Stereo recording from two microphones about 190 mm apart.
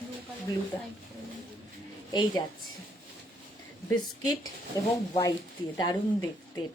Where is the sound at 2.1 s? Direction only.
25° left (ahead or behind).